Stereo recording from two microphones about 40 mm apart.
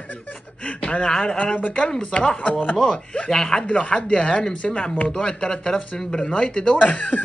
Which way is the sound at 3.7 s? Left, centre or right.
Left.